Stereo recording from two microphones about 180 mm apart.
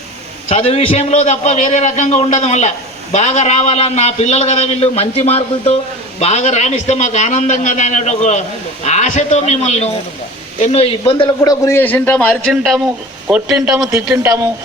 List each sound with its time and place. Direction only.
0.4 s a man's voice: 35° left (ahead or behind); by 13.8 s centre (ahead or behind)
14.1 s speech: 15° right (ahead or behind)